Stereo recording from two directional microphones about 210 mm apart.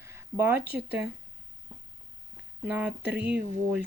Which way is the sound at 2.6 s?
10° right (ahead or behind).